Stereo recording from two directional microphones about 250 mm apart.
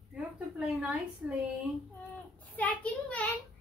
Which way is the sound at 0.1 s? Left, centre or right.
Centre.